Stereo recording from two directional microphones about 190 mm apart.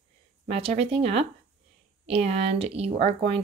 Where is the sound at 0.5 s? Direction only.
30° right (ahead or behind).